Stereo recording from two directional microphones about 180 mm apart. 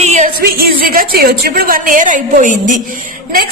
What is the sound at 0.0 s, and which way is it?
Music, 40° right (ahead or behind).